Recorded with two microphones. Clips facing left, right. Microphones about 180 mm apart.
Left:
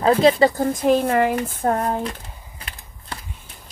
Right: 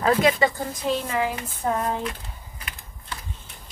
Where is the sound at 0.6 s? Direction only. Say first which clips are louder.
Left 9 dB; 50° left (ahead or behind).